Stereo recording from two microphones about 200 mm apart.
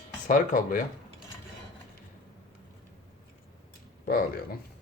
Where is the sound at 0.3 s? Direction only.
40° left (ahead or behind).